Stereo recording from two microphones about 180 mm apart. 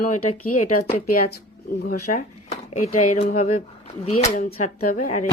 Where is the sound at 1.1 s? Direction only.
55° left (ahead or behind).